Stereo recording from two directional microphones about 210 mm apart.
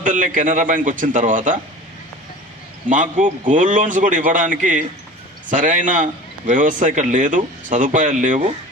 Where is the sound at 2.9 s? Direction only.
35° right (ahead or behind).